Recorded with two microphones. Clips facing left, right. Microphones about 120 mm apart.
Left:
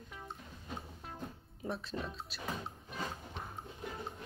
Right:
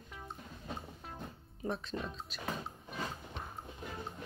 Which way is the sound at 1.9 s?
55° right (ahead or behind).